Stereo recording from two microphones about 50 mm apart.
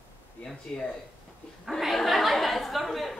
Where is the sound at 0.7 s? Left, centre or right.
Centre.